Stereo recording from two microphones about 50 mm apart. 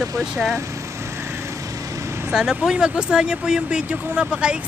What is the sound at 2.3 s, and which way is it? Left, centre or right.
Speech, centre.